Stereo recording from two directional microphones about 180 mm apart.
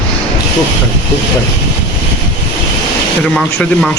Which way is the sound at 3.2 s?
5° left (ahead or behind).